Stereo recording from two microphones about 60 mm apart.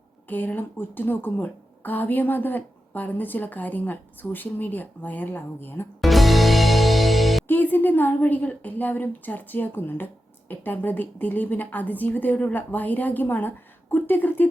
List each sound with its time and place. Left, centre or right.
0.3 s a woman's voice: left
6.0 s music: centre
7.4 s a woman's voice: left